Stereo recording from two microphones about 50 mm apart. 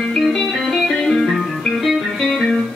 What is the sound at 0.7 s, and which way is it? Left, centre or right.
Music, centre.